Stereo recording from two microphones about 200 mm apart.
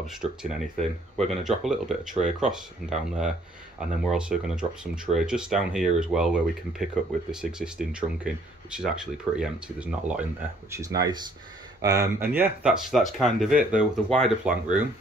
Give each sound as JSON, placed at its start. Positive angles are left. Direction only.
{"t": 0.0, "sound": "speech", "side_deg": -5}
{"t": 10.7, "sound": "speech", "side_deg": -15}